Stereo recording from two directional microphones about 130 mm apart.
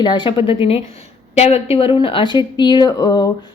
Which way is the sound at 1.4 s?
55° left (ahead or behind).